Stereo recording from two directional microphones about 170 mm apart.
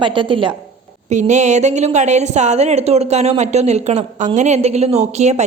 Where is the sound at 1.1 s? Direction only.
45° right (ahead or behind).